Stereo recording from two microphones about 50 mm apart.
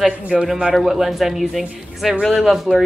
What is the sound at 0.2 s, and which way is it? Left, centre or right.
Speech, right.